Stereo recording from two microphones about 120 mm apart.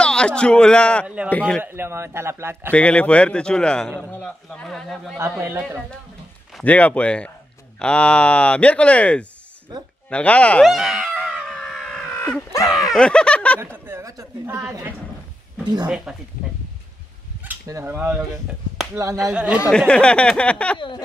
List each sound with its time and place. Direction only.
0.0 s a man's voice: 5° left (ahead or behind)
1.0 s speech: 10° right (ahead or behind)
1.3 s speech: 10° left (ahead or behind)
1.6 s speech: 20° right (ahead or behind)
2.7 s a man's voice: 10° left (ahead or behind)
6.6 s speech: 10° left (ahead or behind)
10.7 s a sound: centre (ahead or behind)
12.2 s a sound: 15° left (ahead or behind)
12.8 s speech: 5° left (ahead or behind)
13.6 s speech: 20° right (ahead or behind)
15.6 s speech: 35° right (ahead or behind)
17.6 s speech: 20° right (ahead or behind)
19.7 s speech: 5° left (ahead or behind)